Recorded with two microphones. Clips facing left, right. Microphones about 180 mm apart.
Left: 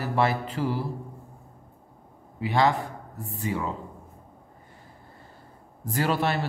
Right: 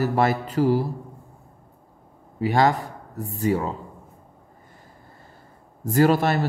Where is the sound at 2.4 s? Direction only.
45° right (ahead or behind).